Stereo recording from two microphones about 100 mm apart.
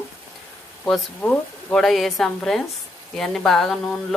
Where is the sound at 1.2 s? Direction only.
15° left (ahead or behind).